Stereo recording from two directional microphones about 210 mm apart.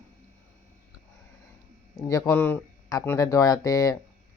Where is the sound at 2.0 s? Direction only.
15° left (ahead or behind).